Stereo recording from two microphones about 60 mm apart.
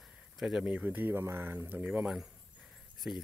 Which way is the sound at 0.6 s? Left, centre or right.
Right.